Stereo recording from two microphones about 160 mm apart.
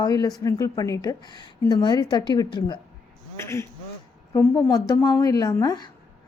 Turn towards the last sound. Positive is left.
turn(degrees=25)  # may be behind; listen again after turning